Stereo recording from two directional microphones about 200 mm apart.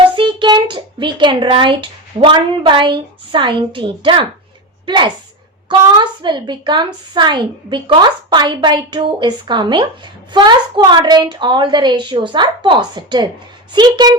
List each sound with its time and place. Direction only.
0.2 s a child's voice: 25° right (ahead or behind)